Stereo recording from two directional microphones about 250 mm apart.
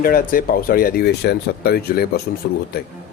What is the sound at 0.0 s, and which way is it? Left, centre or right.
Speech, left.